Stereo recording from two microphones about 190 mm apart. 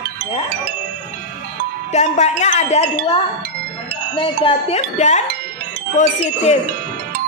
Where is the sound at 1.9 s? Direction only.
35° left (ahead or behind).